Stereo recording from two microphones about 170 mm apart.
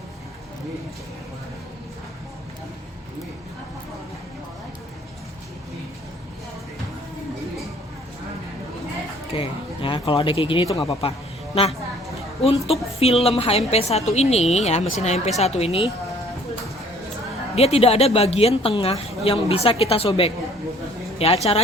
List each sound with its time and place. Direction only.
9.3 s a woman's voice: 30° left (ahead or behind)
12.4 s a woman's voice: 35° left (ahead or behind)
17.5 s a woman's voice: 35° left (ahead or behind)